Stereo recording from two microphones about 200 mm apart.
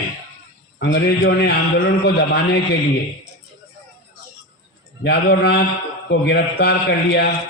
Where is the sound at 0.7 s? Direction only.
55° left (ahead or behind).